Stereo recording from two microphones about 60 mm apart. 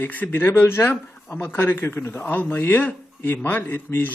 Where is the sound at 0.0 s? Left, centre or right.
Left.